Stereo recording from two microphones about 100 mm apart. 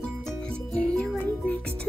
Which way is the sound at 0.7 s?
10° left (ahead or behind).